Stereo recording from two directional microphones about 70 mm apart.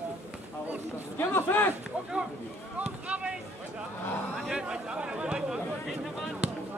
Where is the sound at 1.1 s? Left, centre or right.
Left.